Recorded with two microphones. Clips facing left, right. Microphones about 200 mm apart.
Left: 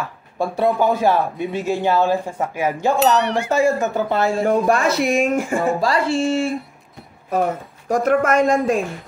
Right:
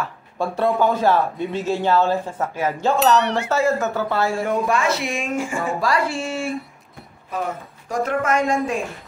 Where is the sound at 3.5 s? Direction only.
15° left (ahead or behind).